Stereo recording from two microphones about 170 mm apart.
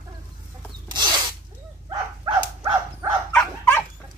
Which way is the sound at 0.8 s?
25° right (ahead or behind).